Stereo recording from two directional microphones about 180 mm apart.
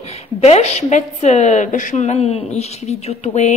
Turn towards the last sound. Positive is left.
turn(degrees=40)  # may be behind; listen again after turning